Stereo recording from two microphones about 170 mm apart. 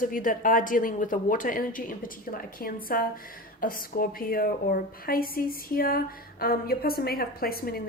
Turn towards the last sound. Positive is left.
turn(degrees=60)  # may be behind; listen again after turning